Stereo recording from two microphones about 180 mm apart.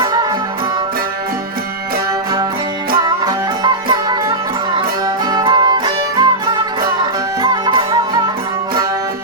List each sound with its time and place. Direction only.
0.0 s music: 25° right (ahead or behind)
3.1 s music: 25° right (ahead or behind)